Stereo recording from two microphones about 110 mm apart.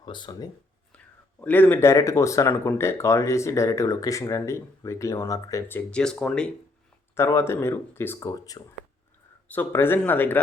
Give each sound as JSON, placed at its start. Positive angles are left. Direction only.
{"t": 0.0, "sound": "speech", "side_deg": 45}
{"t": 0.9, "sound": "speech", "side_deg": 15}
{"t": 5.9, "sound": "speech", "side_deg": 5}
{"t": 7.2, "sound": "speech", "side_deg": 25}